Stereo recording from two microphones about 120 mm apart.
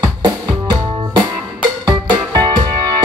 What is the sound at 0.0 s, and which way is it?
Music, 35° right (ahead or behind).